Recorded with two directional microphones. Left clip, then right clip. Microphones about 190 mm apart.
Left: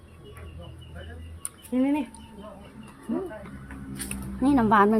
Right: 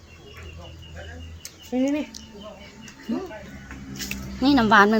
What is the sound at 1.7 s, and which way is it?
Speech, 50° left (ahead or behind).